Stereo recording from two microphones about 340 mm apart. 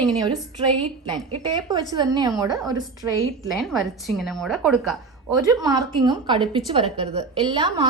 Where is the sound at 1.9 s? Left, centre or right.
Centre.